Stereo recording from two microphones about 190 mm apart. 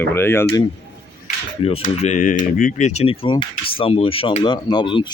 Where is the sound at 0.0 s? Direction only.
10° left (ahead or behind).